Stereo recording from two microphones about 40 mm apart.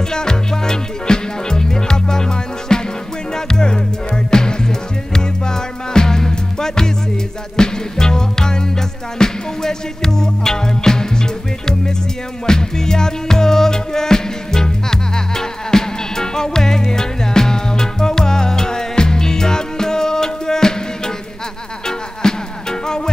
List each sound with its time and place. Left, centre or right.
0.1 s music: centre